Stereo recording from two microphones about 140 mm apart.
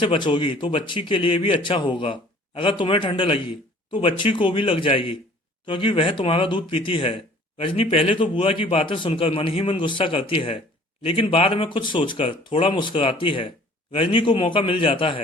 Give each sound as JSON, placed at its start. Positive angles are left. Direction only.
{"t": 0.0, "sound": "a man's voice", "side_deg": 35}